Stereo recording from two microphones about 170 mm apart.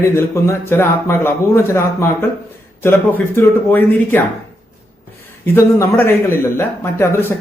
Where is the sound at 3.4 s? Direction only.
10° left (ahead or behind).